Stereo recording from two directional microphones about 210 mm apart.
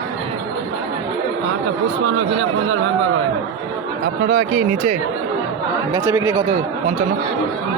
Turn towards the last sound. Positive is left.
turn(degrees=-10)  # may be behind; listen again after turning